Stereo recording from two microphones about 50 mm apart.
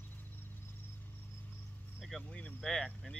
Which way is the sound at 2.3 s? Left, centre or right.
Left.